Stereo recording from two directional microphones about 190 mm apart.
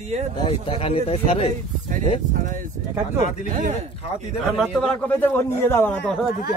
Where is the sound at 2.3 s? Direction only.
45° right (ahead or behind).